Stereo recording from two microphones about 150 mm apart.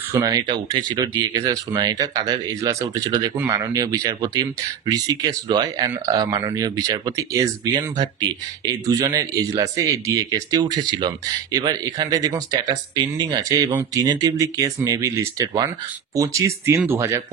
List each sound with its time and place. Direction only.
0.1 s speech: 25° right (ahead or behind)